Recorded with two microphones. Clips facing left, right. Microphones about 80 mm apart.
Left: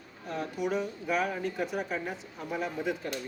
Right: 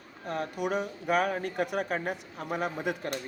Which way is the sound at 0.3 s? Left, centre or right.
Right.